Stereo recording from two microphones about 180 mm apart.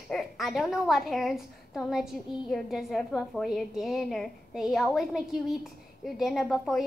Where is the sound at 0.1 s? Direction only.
Centre (ahead or behind).